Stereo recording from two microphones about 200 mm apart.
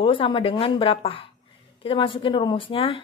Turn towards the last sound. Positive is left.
turn(degrees=30)  # may be behind; listen again after turning